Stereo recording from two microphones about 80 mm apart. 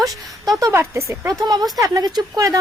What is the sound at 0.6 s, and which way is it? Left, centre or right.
Speech, right.